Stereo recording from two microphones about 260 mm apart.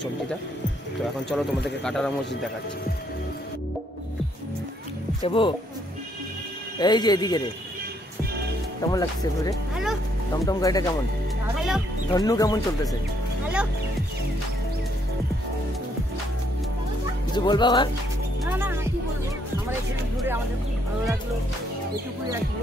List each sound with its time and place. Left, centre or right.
1.6 s speech: centre
5.2 s speech: centre
6.8 s speech: centre
8.8 s speech: centre
11.4 s speech: centre
12.1 s speech: centre
17.5 s speech: centre
18.4 s music: centre